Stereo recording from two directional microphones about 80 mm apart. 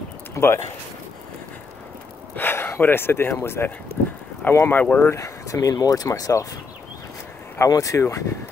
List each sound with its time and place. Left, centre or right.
0.4 s a sound: left
2.3 s speech: left
5.1 s speech: left
7.5 s speech: left